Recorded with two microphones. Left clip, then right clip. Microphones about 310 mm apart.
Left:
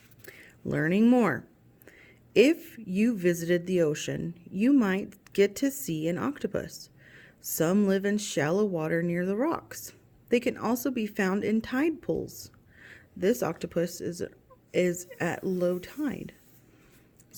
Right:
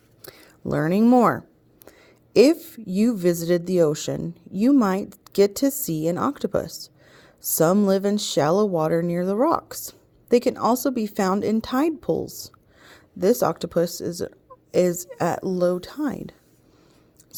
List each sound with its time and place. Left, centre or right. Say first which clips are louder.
0.2 s speech: right 5 dB; centre